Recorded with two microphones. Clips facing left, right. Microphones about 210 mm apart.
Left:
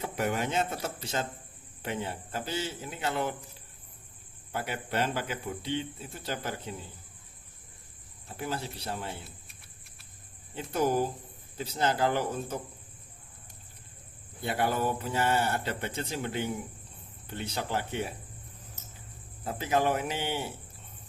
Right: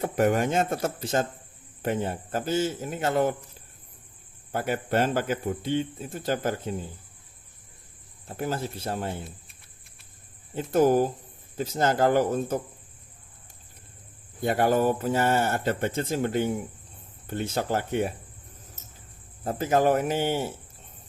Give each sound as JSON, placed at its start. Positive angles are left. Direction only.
{"t": 0.0, "sound": "speech", "side_deg": -50}
{"t": 4.5, "sound": "speech", "side_deg": -45}
{"t": 8.3, "sound": "speech", "side_deg": -45}
{"t": 10.5, "sound": "speech", "side_deg": -45}
{"t": 14.4, "sound": "speech", "side_deg": -45}
{"t": 19.5, "sound": "speech", "side_deg": -45}